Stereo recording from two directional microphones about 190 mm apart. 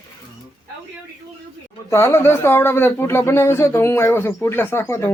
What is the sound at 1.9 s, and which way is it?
Speech, 10° left (ahead or behind).